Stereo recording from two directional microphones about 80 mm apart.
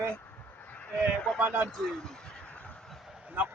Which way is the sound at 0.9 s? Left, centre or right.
Centre.